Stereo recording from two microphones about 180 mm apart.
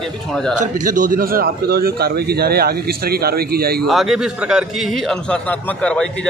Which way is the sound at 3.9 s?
Centre (ahead or behind).